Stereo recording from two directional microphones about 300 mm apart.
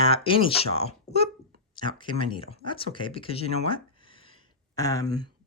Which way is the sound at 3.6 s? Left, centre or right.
Centre.